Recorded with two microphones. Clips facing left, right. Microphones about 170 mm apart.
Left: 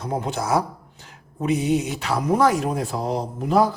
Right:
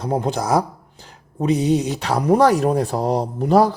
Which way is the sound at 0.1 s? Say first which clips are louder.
Right 3 dB; 35° right (ahead or behind).